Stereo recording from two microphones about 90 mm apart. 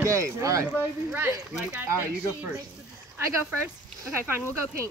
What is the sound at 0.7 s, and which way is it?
Speech, 20° right (ahead or behind).